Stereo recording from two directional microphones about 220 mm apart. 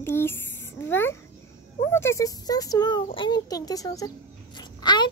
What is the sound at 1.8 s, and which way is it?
A child's voice, 10° left (ahead or behind).